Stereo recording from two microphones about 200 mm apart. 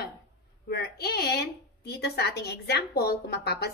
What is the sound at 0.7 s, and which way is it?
A woman's voice, 55° left (ahead or behind).